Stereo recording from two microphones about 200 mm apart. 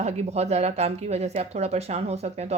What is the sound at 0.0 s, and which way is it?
Speech, 35° right (ahead or behind).